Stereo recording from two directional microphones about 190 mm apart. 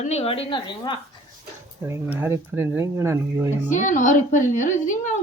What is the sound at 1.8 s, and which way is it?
Speech, 15° right (ahead or behind).